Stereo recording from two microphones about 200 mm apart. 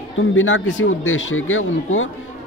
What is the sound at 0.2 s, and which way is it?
A man's voice, 75° left (ahead or behind).